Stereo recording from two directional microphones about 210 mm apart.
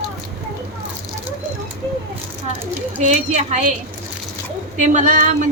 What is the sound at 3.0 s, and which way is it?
Speech, 35° right (ahead or behind).